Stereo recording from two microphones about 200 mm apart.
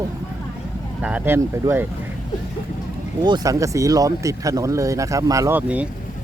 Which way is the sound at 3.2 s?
20° right (ahead or behind).